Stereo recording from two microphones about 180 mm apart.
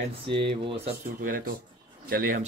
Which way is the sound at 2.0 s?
55° right (ahead or behind).